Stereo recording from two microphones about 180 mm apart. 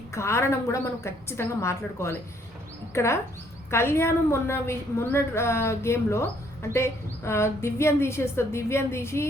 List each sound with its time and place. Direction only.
0.1 s a woman's voice: 15° left (ahead or behind)